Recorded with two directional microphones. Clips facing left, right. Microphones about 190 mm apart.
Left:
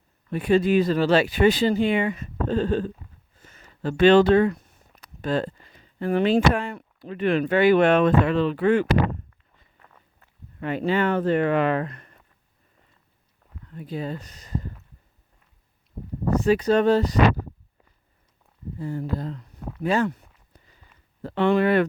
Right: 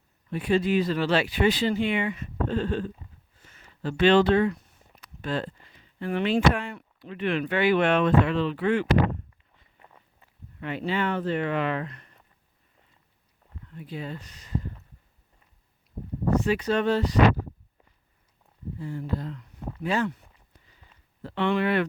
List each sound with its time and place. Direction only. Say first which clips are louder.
0.3 s speech: left 4 dB; 50° left (ahead or behind)
9.8 s walk: right 2 dB; 15° right (ahead or behind)
10.6 s speech: left 5 dB; 45° left (ahead or behind)
13.7 s speech: left 5 dB; 40° left (ahead or behind)
16.3 s speech: left 5 dB; 40° left (ahead or behind)
18.8 s speech: left 3 dB; 45° left (ahead or behind)
21.2 s speech: left 5 dB; 45° left (ahead or behind)